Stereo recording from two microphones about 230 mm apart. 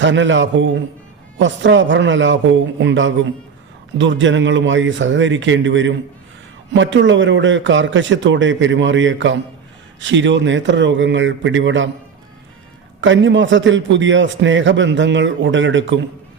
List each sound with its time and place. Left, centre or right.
0.0 s a man's voice: right
13.0 s a man's voice: right